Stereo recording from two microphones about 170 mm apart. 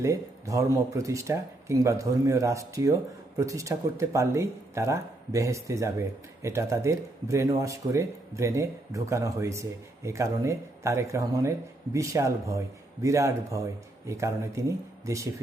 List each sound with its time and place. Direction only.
0.0 s speech: 20° right (ahead or behind)